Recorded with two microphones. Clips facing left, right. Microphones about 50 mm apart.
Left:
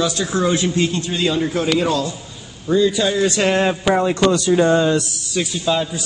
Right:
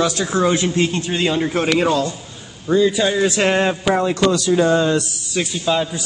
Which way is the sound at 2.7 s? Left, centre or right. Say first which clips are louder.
Right 1 dB; centre.